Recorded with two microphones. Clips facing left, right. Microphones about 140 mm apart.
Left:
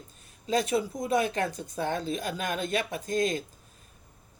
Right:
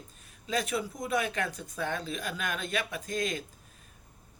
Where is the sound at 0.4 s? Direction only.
35° left (ahead or behind).